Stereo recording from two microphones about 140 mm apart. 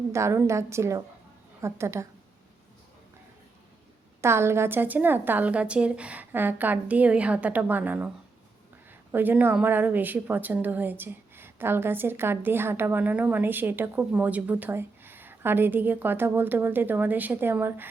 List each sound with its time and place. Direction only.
0.1 s a woman's voice: 20° right (ahead or behind)
4.2 s a woman's voice: 20° right (ahead or behind)
9.1 s a woman's voice: 15° right (ahead or behind)